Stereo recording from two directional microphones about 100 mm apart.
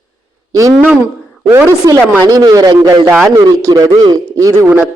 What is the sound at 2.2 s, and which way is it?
A man's voice, 35° right (ahead or behind).